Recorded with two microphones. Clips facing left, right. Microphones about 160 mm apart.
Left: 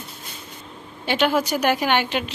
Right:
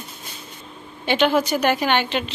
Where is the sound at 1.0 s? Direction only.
5° left (ahead or behind).